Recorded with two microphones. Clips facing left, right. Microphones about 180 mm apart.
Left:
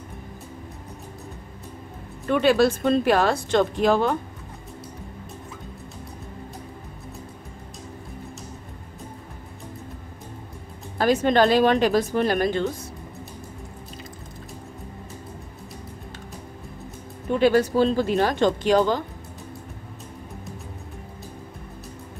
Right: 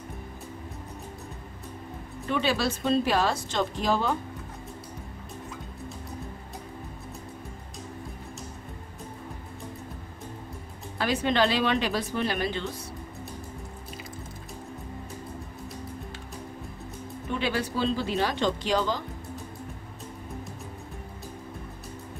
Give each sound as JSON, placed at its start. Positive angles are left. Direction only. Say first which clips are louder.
{"t": 2.2, "sound": "speech", "louder": "left 8 dB", "side_deg": 55}
{"t": 11.0, "sound": "speech", "louder": "left 6 dB", "side_deg": 45}
{"t": 17.3, "sound": "speech", "louder": "left 10 dB", "side_deg": 45}